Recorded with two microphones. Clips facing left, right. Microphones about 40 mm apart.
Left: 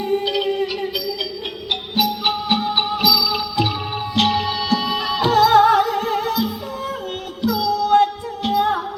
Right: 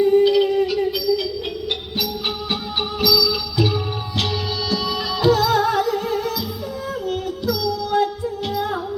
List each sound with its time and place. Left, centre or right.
0.0 s music: left
2.0 s music: left
7.4 s music: left